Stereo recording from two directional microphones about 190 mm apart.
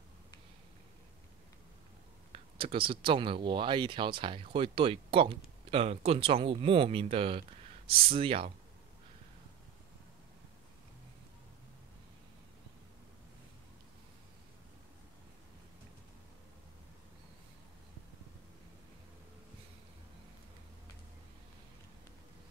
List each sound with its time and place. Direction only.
2.3 s speech: 30° right (ahead or behind)